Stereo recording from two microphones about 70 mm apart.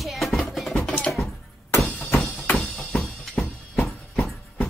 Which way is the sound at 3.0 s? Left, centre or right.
Centre.